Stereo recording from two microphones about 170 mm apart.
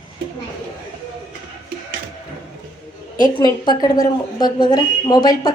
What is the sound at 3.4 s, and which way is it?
A woman's voice, 25° left (ahead or behind).